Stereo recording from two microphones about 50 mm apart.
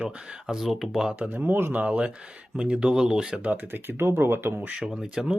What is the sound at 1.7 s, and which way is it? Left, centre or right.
Speech, right.